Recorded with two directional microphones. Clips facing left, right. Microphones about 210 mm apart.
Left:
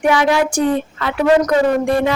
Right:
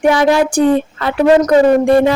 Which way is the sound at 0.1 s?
35° right (ahead or behind).